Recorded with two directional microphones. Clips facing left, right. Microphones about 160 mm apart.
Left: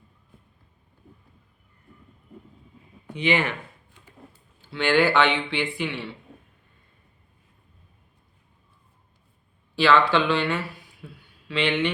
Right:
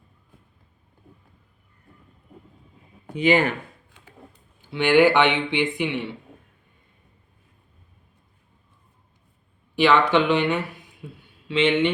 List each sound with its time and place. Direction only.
3.2 s speech: 45° right (ahead or behind)
4.6 s speech: 15° right (ahead or behind)
9.7 s speech: 20° right (ahead or behind)